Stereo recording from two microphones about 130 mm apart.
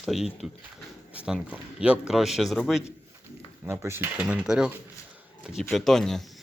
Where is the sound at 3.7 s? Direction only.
20° right (ahead or behind).